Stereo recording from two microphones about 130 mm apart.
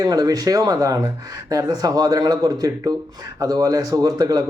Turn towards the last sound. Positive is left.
turn(degrees=-30)  # may be behind; listen again after turning